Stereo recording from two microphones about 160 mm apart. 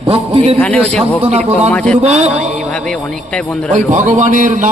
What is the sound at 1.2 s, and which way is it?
Speech, 45° right (ahead or behind).